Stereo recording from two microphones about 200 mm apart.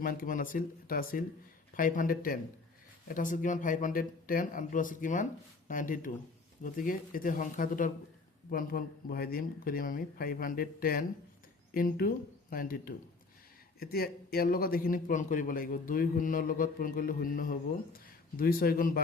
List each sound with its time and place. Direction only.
0.0 s a man's voice: 45° left (ahead or behind)